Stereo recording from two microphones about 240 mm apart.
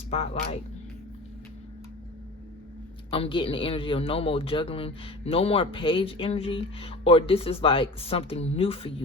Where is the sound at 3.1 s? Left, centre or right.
Left.